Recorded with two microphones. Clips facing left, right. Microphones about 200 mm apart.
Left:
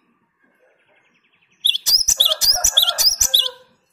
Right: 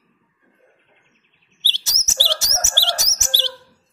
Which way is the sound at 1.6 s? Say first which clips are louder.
Even; 15° left (ahead or behind).